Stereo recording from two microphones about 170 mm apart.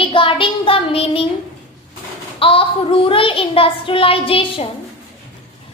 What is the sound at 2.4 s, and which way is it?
A child's voice, 30° left (ahead or behind).